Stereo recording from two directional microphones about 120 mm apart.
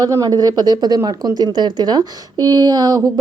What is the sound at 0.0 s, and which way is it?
Speech, 30° right (ahead or behind).